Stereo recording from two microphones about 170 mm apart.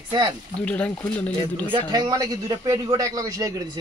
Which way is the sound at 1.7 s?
25° right (ahead or behind).